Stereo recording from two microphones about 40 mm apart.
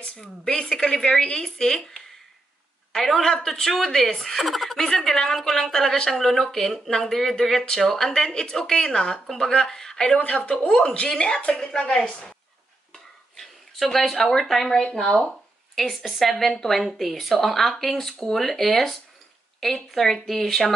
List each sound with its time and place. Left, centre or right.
0.0 s a woman's voice: left
10.0 s speech: left
13.4 s a sound: centre
14.5 s speech: centre
14.8 s speech: left
15.7 s speech: centre